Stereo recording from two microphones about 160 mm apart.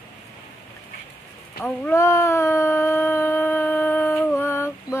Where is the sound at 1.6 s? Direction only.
15° left (ahead or behind).